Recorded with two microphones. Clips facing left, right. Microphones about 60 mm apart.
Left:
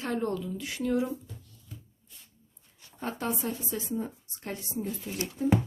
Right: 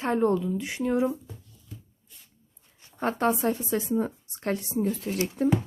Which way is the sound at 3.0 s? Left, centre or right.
Right.